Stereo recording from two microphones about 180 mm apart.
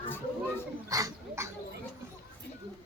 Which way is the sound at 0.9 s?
15° right (ahead or behind).